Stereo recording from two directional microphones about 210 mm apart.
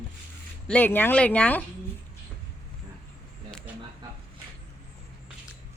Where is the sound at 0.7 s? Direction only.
10° left (ahead or behind).